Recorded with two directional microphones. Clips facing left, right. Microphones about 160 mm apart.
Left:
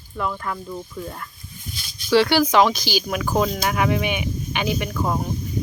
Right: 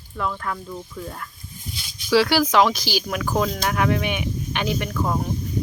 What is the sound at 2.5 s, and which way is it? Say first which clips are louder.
Speech: left 1 dB; 5° right (ahead or behind).